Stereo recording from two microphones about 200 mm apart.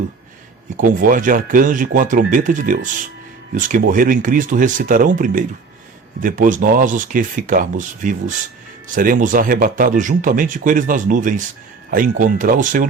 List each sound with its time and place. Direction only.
0.8 s speech: 45° right (ahead or behind)